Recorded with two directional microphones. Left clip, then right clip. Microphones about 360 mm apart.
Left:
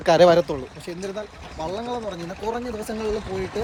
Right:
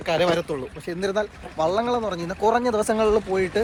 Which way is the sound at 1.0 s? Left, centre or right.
Centre.